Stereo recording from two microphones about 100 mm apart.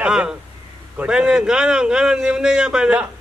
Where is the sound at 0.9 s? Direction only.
10° right (ahead or behind).